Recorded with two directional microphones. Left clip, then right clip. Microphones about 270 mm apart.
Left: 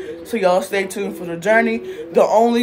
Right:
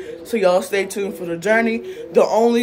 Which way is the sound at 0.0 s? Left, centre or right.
Centre.